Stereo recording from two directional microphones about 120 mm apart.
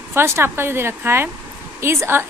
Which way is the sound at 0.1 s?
20° right (ahead or behind).